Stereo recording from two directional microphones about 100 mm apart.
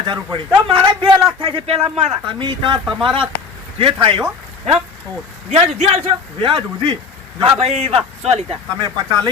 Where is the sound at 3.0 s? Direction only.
60° right (ahead or behind).